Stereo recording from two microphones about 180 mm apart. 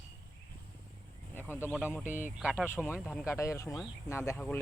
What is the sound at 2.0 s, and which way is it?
Speech, 45° left (ahead or behind).